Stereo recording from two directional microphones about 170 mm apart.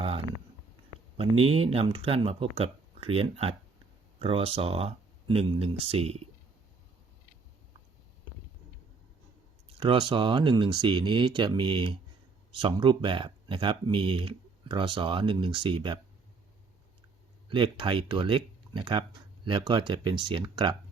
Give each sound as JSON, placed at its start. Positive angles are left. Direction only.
{"t": 1.1, "sound": "speech", "side_deg": -35}
{"t": 9.7, "sound": "speech", "side_deg": -30}
{"t": 17.5, "sound": "speech", "side_deg": -30}